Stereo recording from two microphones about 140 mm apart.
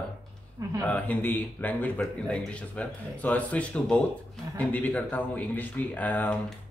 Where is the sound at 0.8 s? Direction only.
10° left (ahead or behind).